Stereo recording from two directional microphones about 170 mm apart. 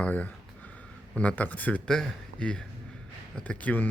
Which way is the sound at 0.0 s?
10° left (ahead or behind).